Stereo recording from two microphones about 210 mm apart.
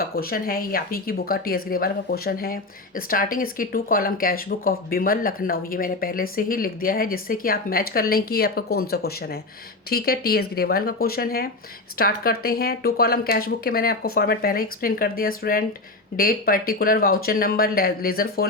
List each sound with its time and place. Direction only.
0.0 s speech: 45° left (ahead or behind)